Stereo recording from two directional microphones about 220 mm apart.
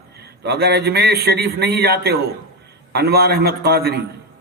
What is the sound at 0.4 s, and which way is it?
A man's voice, 45° right (ahead or behind).